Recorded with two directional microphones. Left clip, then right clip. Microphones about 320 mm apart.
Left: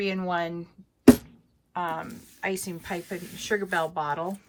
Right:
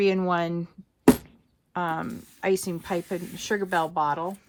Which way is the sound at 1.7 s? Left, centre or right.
Right.